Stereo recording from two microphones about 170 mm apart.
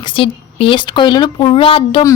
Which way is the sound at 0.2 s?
30° left (ahead or behind).